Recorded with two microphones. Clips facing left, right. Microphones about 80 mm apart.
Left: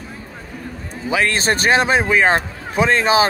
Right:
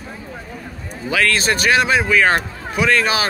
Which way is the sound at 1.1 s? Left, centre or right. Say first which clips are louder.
Even; left.